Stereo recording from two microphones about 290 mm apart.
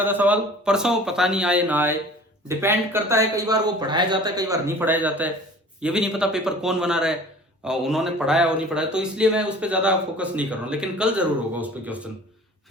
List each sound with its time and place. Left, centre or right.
0.0 s a man's voice: centre